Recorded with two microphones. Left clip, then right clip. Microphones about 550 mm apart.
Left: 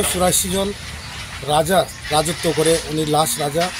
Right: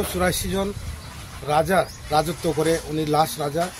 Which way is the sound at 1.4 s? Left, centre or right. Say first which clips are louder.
Left 3 dB; right.